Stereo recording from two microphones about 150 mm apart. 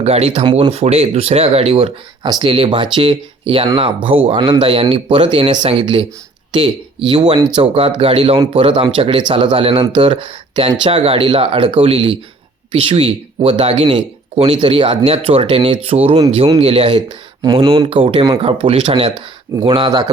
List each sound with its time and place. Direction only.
0.0 s speech: 45° right (ahead or behind)